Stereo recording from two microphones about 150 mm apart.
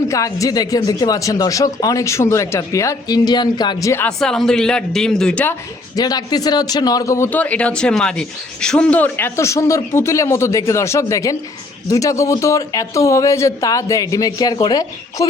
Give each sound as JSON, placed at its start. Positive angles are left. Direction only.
{"t": 0.1, "sound": "speech", "side_deg": 20}
{"t": 4.2, "sound": "a man's voice", "side_deg": 5}
{"t": 6.0, "sound": "speech", "side_deg": 25}